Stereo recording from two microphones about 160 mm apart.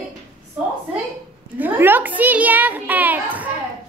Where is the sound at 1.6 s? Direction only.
10° right (ahead or behind).